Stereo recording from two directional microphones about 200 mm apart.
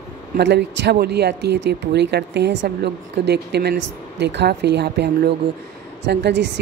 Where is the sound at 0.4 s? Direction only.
60° right (ahead or behind).